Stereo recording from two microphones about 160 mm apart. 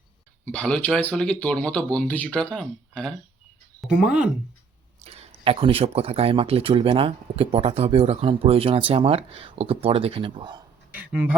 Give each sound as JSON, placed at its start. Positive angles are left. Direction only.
{"t": 0.4, "sound": "speech", "side_deg": 5}
{"t": 4.9, "sound": "speech", "side_deg": -40}
{"t": 10.9, "sound": "speech", "side_deg": -10}